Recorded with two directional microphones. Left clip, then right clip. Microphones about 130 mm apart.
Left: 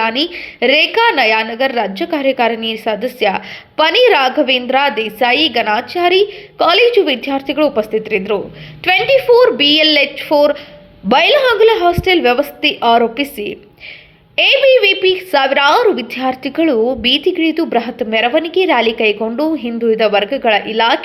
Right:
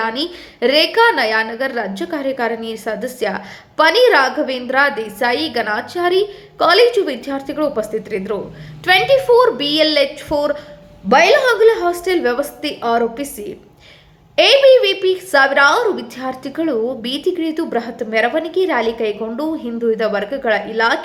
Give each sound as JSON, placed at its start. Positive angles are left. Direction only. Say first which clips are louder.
{"t": 0.0, "sound": "a woman's voice", "louder": "left 5 dB", "side_deg": 20}
{"t": 11.1, "sound": "a woman's voice", "louder": "left 1 dB", "side_deg": 35}